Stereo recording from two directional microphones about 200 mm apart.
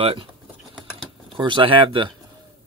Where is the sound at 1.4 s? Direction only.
25° right (ahead or behind).